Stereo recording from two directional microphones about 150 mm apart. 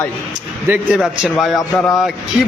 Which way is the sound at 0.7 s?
10° right (ahead or behind).